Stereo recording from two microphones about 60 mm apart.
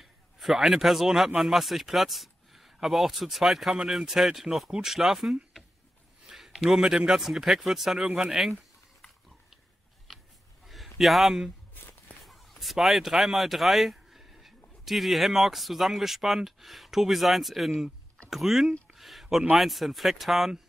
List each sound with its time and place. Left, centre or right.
0.0 s a man's voice: centre
10.1 s a sound: centre
14.9 s speech: centre